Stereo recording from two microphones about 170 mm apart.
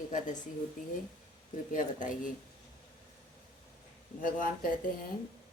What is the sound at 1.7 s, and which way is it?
Speech, 50° left (ahead or behind).